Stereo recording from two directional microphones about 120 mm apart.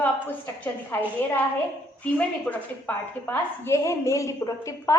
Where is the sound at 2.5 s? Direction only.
15° left (ahead or behind).